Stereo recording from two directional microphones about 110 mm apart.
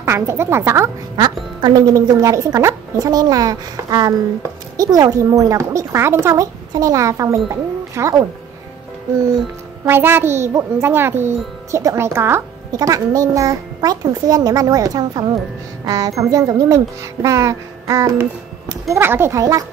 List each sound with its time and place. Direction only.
0.0 s speech: 25° right (ahead or behind)
1.1 s a woman's voice: 40° right (ahead or behind)
9.8 s speech: 20° right (ahead or behind)